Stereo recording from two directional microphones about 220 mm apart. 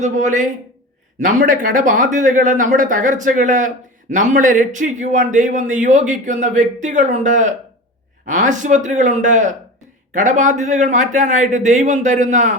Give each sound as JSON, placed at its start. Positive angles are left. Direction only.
{"t": 0.0, "sound": "a man's voice", "side_deg": -35}